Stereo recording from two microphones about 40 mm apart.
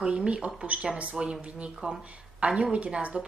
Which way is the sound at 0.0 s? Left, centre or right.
Right.